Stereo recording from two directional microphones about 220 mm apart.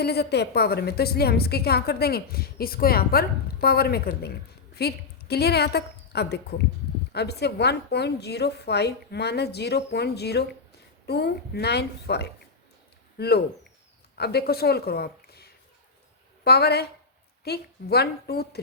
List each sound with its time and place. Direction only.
0.0 s a woman's voice: 45° left (ahead or behind)